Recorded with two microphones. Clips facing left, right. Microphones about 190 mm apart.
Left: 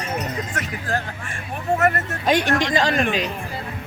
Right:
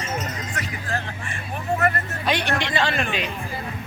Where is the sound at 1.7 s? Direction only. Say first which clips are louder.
Left 3 dB; 45° left (ahead or behind).